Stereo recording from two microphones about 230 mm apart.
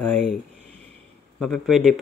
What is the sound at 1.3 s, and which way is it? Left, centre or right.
Speech, centre.